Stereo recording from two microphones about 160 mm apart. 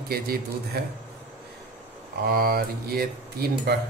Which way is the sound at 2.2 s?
70° right (ahead or behind).